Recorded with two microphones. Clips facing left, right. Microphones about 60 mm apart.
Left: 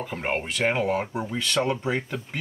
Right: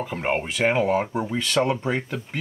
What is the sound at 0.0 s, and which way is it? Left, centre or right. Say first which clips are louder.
Speech: right 3 dB; centre.